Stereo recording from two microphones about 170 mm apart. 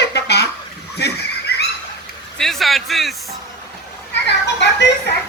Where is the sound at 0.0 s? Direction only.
75° left (ahead or behind).